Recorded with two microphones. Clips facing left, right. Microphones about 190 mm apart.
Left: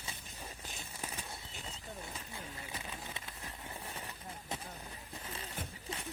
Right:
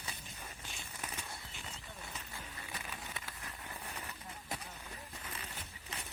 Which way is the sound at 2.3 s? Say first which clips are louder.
Left 2 dB; 20° left (ahead or behind).